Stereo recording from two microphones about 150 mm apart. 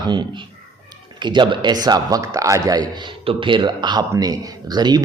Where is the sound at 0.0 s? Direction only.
30° right (ahead or behind).